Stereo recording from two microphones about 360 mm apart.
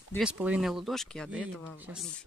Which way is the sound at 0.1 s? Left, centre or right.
Centre.